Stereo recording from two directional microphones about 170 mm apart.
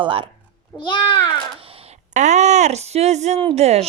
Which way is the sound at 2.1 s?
45° right (ahead or behind).